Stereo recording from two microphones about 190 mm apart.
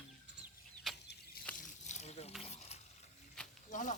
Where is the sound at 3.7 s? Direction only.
40° left (ahead or behind).